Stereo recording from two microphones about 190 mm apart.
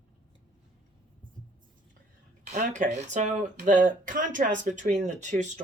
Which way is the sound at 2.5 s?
40° right (ahead or behind).